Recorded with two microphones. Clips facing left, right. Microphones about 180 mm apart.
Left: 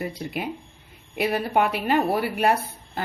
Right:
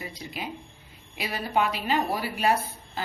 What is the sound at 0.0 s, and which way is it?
A woman's voice, 55° left (ahead or behind).